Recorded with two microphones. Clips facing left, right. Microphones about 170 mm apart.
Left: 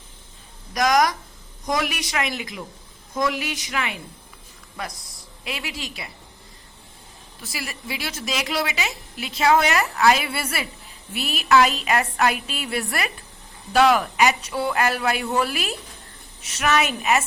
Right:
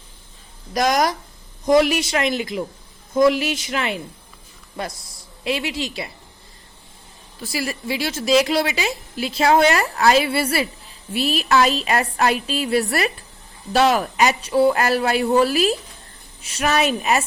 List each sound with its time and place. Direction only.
0.7 s a woman's voice: 30° right (ahead or behind)
5.5 s a woman's voice: 30° right (ahead or behind)
7.4 s a woman's voice: 35° right (ahead or behind)